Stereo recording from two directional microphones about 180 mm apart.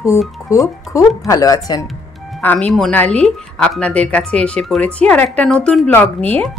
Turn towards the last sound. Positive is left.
turn(degrees=5)  # may be behind; listen again after turning